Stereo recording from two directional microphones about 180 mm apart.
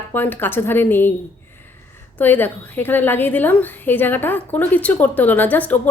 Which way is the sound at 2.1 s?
10° left (ahead or behind).